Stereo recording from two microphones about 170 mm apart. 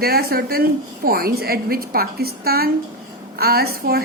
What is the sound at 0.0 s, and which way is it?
A woman's voice, 65° right (ahead or behind).